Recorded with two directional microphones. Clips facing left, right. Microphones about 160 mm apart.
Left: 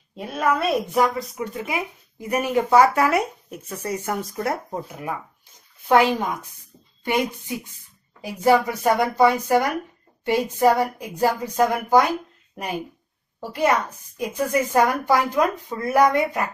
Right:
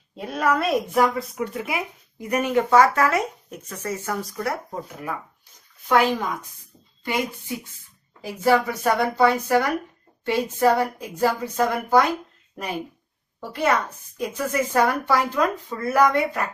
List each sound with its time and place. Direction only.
0.2 s speech: centre (ahead or behind); by 5.1 s 20° left (ahead or behind)
7.1 s a woman's voice: 15° left (ahead or behind)
13.4 s a woman's voice: 15° left (ahead or behind)